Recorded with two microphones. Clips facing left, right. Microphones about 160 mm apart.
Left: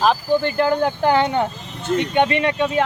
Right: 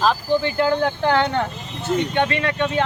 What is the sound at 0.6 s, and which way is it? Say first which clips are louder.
Speech: left 1 dB; 10° left (ahead or behind).